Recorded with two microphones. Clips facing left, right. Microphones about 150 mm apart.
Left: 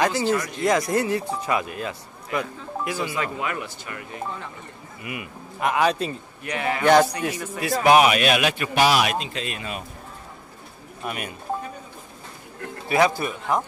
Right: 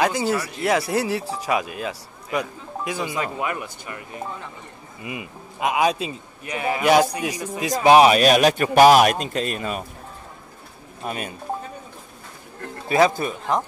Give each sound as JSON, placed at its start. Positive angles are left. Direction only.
{"t": 0.0, "sound": "a man's voice", "side_deg": -10}
{"t": 5.0, "sound": "speech", "side_deg": -25}
{"t": 5.7, "sound": "a man's voice", "side_deg": -15}
{"t": 7.9, "sound": "a man's voice", "side_deg": -35}
{"t": 11.1, "sound": "speech", "side_deg": -30}
{"t": 12.8, "sound": "speech", "side_deg": -25}